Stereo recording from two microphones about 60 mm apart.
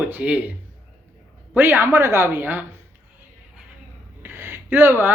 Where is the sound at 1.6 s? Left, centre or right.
Right.